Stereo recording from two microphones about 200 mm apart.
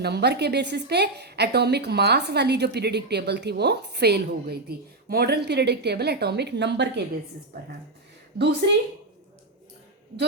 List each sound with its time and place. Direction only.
0.0 s a woman's voice: 55° right (ahead or behind)
8.4 s a woman's voice: 55° right (ahead or behind)